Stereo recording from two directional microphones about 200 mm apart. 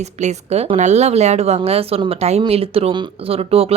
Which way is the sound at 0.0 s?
35° right (ahead or behind).